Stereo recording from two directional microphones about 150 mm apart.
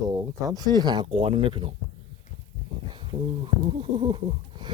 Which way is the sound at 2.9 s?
35° right (ahead or behind).